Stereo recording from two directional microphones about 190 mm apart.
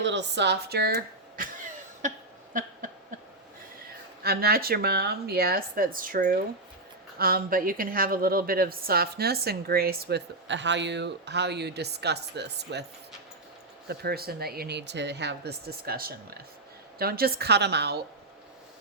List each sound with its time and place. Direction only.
0.0 s a woman's voice: 70° right (ahead or behind)
2.0 s a sound: 40° right (ahead or behind)
4.2 s a woman's voice: 55° right (ahead or behind)
13.8 s a woman's voice: 55° right (ahead or behind)